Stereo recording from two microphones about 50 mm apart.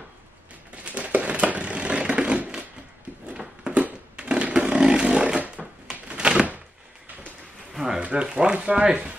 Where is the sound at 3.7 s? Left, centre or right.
Centre.